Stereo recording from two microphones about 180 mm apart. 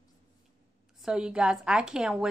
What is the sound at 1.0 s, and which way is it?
A woman's voice, 5° right (ahead or behind).